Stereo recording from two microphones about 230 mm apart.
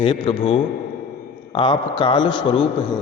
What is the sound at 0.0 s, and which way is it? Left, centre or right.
A man's voice, left.